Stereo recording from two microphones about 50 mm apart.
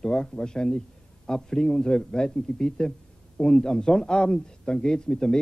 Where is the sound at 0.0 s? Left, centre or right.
Centre.